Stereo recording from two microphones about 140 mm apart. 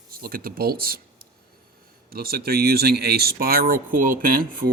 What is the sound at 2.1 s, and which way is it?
Speech, 90° right.